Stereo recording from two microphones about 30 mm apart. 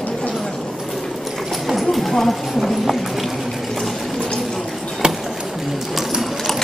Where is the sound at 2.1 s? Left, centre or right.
Centre.